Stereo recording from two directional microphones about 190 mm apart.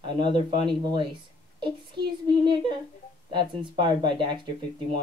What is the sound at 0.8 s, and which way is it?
Speech, 25° right (ahead or behind).